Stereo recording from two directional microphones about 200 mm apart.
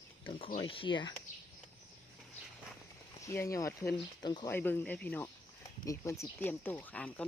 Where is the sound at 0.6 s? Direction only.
25° left (ahead or behind).